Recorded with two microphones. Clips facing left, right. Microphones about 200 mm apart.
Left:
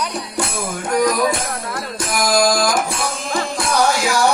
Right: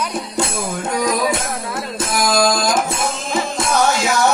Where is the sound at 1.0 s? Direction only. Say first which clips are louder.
Even; 25° right (ahead or behind).